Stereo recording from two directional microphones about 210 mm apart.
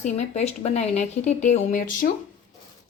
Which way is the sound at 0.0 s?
30° left (ahead or behind).